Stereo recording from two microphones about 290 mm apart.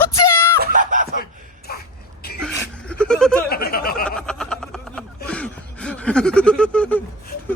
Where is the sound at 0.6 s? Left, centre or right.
Right.